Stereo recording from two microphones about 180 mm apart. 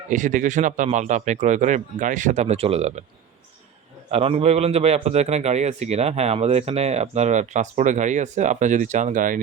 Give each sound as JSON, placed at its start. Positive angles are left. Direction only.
{"t": 0.1, "sound": "a man's voice", "side_deg": -45}
{"t": 4.1, "sound": "a man's voice", "side_deg": -35}